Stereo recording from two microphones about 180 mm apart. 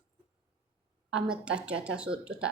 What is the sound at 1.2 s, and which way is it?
Speech, 5° right (ahead or behind).